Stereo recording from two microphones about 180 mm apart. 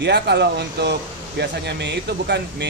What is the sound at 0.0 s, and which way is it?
Speech, 70° right (ahead or behind).